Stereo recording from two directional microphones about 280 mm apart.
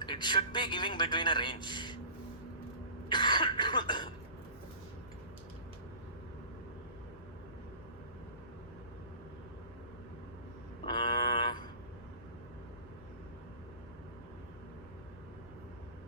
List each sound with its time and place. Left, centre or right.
0.0 s a man's voice: centre
3.1 s cough: centre
10.8 s a sound: centre